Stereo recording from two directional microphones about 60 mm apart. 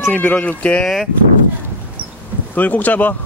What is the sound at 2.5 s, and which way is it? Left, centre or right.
Speech, left.